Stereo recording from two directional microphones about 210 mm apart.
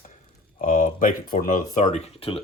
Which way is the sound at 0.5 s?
40° left (ahead or behind).